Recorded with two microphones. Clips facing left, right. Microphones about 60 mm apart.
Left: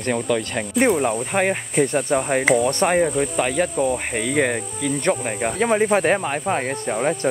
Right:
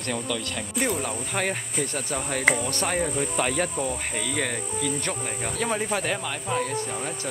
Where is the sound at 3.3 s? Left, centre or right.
Centre.